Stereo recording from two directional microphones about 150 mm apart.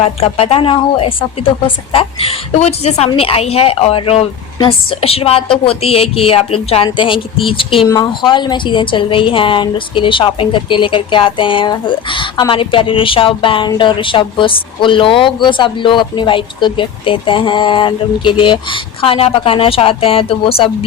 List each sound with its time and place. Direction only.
0.0 s a woman's voice: 40° left (ahead or behind)
7.9 s a woman's voice: 25° left (ahead or behind)